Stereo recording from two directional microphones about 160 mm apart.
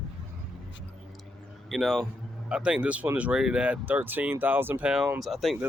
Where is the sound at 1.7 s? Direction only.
Centre (ahead or behind).